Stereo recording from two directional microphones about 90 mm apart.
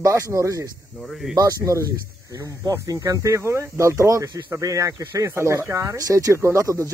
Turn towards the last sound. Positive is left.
turn(degrees=-35)  # may be behind; listen again after turning